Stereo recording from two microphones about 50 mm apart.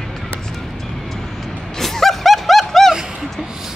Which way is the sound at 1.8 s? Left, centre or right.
Centre.